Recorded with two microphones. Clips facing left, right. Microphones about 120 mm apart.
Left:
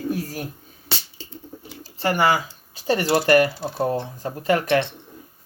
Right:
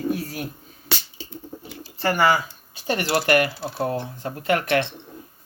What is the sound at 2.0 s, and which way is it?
Speech, 15° left (ahead or behind).